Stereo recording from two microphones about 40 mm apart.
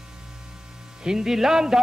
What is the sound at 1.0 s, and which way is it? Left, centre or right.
Speech, centre.